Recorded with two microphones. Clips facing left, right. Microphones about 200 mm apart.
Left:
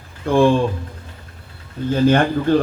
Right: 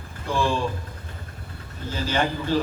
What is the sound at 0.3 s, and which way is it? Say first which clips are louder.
Speech: left 10 dB; 55° left (ahead or behind).